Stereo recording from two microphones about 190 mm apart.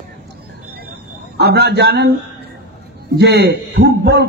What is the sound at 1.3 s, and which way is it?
Speech, 60° right (ahead or behind).